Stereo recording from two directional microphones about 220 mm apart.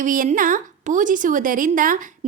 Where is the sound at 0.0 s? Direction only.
35° right (ahead or behind).